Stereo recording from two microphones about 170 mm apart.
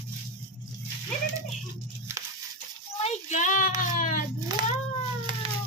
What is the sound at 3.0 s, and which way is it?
Child singing, 45° left (ahead or behind).